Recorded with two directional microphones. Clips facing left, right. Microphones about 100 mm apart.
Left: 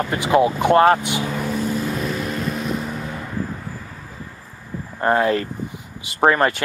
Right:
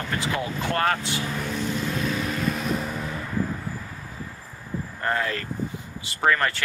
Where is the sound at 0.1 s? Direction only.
20° left (ahead or behind).